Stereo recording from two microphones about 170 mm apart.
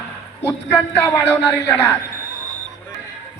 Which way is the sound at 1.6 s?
15° left (ahead or behind).